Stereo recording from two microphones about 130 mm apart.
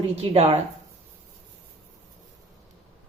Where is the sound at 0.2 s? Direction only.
50° right (ahead or behind).